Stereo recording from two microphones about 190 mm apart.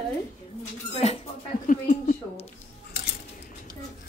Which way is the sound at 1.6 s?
45° left (ahead or behind).